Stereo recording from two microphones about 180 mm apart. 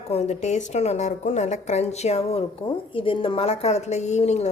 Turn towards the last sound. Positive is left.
turn(degrees=40)  # may be behind; listen again after turning